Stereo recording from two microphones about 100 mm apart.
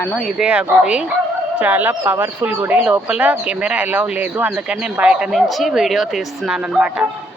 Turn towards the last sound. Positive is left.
turn(degrees=-10)  # may be behind; listen again after turning